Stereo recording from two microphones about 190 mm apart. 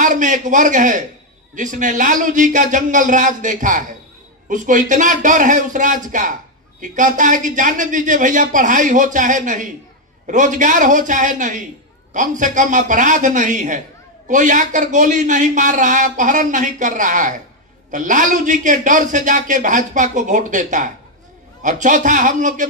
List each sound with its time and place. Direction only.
0.0 s a man's voice: 40° right (ahead or behind)